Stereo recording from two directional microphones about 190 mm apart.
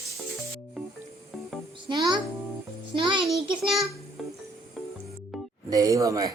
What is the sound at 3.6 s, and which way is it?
Speech, centre (ahead or behind).